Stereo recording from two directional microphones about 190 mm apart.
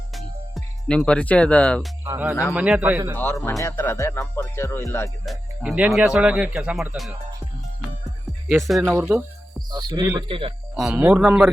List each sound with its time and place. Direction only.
0.1 s music: centre (ahead or behind)
2.3 s speech: 15° left (ahead or behind)
2.6 s a man's voice: 5° right (ahead or behind)
3.2 s speech: 10° left (ahead or behind)
5.2 s speech: centre (ahead or behind)
8.4 s speech: centre (ahead or behind)
8.8 s a man's voice: 10° right (ahead or behind); by 10.5 s 25° right (ahead or behind)
10.8 s speech: 5° right (ahead or behind)